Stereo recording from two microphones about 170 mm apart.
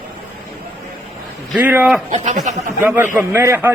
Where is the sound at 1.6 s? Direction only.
10° right (ahead or behind).